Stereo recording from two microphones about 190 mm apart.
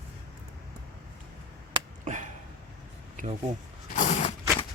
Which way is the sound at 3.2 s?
45° right (ahead or behind).